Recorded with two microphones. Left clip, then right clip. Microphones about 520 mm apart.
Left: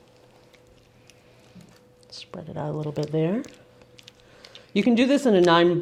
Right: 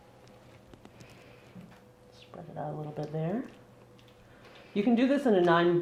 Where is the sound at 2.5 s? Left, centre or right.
Left.